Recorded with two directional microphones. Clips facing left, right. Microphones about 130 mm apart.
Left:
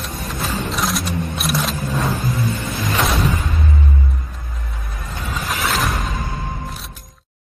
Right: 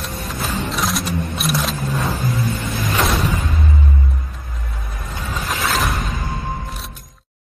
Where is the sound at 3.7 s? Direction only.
Centre (ahead or behind).